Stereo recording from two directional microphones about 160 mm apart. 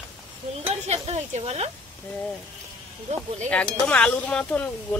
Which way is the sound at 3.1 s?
50° right (ahead or behind).